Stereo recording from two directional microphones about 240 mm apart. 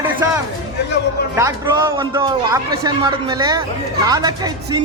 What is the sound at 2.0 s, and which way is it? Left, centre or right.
A man's voice, centre.